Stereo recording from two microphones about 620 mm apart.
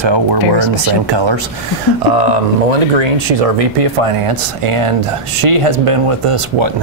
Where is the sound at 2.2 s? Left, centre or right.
Right.